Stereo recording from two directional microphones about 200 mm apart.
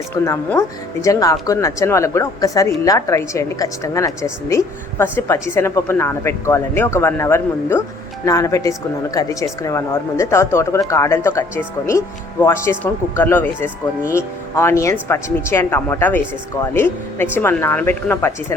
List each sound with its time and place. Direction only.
0.1 s a woman's voice: 15° left (ahead or behind)